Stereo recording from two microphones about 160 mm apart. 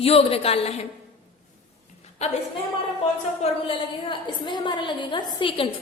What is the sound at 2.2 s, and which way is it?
Speech, 45° left (ahead or behind).